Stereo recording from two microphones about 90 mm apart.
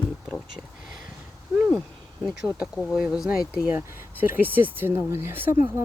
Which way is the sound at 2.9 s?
10° right (ahead or behind).